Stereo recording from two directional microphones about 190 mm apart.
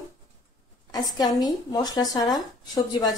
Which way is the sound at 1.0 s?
20° left (ahead or behind).